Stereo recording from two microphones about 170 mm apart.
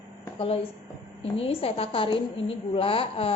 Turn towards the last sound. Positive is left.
turn(degrees=35)  # may be behind; listen again after turning